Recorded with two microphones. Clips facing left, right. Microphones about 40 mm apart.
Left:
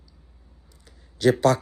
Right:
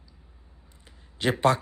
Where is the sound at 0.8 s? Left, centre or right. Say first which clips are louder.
Left 7 dB; right.